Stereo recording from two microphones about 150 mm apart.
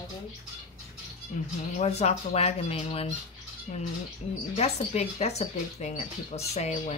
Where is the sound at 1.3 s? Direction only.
50° left (ahead or behind).